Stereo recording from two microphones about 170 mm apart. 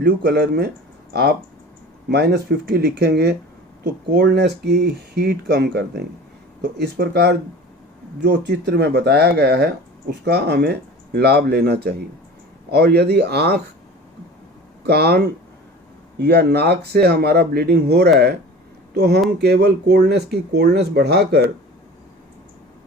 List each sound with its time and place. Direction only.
0.0 s speech: 90° right; by 0.7 s 75° right (ahead or behind)
2.0 s speech: 75° right (ahead or behind)
14.8 s speech: 70° right (ahead or behind)